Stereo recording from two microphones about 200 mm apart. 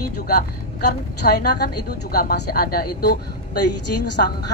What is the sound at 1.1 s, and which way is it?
A woman's voice, 50° left (ahead or behind).